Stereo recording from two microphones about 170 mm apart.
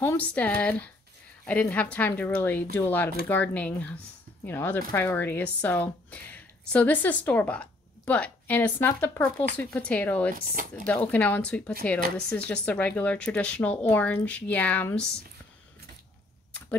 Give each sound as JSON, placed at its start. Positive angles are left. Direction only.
{"t": 0.0, "sound": "speech", "side_deg": 10}
{"t": 10.3, "sound": "speech", "side_deg": -55}
{"t": 10.9, "sound": "speech", "side_deg": 10}